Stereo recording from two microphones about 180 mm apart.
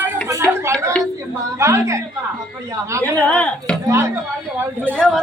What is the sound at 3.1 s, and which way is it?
Speech, 10° left (ahead or behind).